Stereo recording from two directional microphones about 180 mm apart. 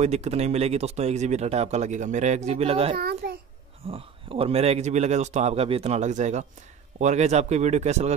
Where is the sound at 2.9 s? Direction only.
60° right (ahead or behind).